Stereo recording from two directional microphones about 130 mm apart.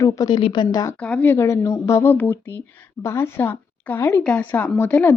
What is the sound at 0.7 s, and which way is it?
Speech, 25° left (ahead or behind).